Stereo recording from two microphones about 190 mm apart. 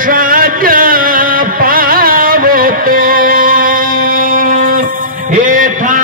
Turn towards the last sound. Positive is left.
turn(degrees=-45)  # may be behind; listen again after turning